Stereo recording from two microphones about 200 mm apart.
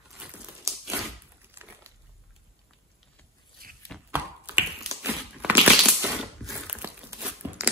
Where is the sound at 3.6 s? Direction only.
50° right (ahead or behind).